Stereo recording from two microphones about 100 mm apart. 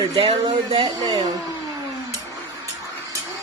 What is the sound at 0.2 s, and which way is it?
Speech, 60° right (ahead or behind).